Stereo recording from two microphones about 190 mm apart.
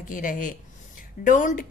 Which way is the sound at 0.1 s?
45° left (ahead or behind).